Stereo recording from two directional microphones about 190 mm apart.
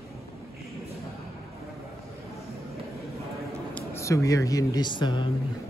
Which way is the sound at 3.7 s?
10° left (ahead or behind).